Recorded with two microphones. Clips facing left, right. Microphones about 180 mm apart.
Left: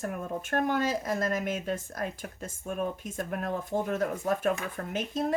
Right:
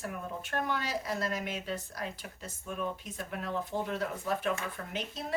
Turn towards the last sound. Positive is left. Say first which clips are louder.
# left 6 dB
turn(degrees=45)  # may be behind; listen again after turning